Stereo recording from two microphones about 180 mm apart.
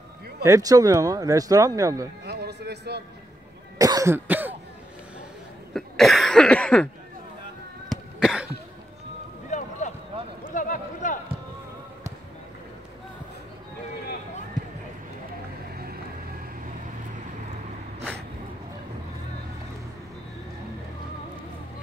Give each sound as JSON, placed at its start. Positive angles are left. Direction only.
{"t": 0.4, "sound": "speech", "side_deg": -20}
{"t": 2.2, "sound": "music", "side_deg": -65}
{"t": 3.7, "sound": "cough", "side_deg": -20}
{"t": 5.7, "sound": "cough", "side_deg": 0}
{"t": 7.9, "sound": "cough", "side_deg": 0}
{"t": 9.5, "sound": "a sound", "side_deg": 40}
{"t": 15.7, "sound": "music", "side_deg": -60}